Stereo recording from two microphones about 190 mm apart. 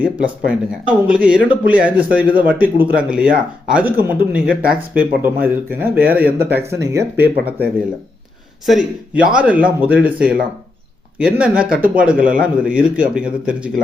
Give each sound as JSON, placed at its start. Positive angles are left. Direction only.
{"t": 0.0, "sound": "a man's voice", "side_deg": -5}
{"t": 6.2, "sound": "speech", "side_deg": -55}
{"t": 6.8, "sound": "a man's voice", "side_deg": -15}